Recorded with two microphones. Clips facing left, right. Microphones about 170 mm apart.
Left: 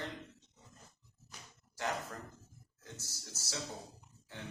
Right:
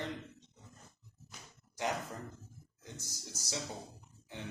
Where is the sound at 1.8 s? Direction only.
15° right (ahead or behind).